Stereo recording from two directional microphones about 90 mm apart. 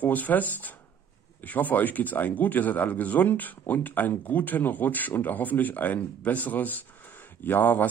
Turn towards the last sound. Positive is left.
turn(degrees=20)  # may be behind; listen again after turning